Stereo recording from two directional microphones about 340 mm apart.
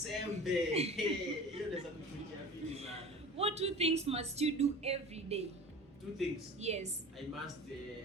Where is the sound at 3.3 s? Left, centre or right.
Centre.